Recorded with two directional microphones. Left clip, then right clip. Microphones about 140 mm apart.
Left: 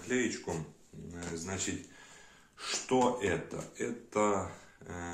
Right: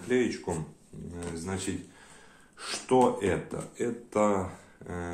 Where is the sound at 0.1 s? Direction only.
30° right (ahead or behind).